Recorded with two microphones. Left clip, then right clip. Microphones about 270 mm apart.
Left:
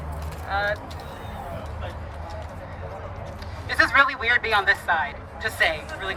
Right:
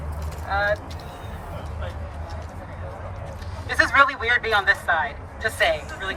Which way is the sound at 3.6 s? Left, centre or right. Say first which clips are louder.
Right 1 dB; centre.